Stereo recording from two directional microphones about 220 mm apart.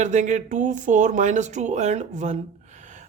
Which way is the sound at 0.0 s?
35° right (ahead or behind).